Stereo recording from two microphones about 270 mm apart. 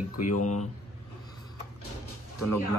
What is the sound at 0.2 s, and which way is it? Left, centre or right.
Speech, left.